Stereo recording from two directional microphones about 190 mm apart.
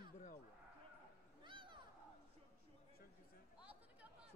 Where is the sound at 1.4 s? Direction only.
25° right (ahead or behind).